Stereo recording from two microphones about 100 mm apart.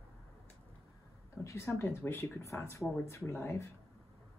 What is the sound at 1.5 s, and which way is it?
Speech, 30° left (ahead or behind).